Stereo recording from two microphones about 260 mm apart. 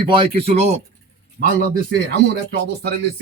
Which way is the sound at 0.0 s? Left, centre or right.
Centre.